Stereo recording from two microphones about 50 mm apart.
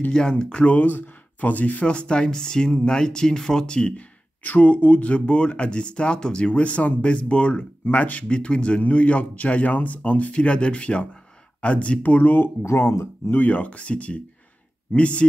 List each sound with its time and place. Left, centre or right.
0.1 s speech: centre
0.7 s speech: left; by 3.9 s centre
3.9 s speech: left
12.6 s speech: left
13.3 s speech: left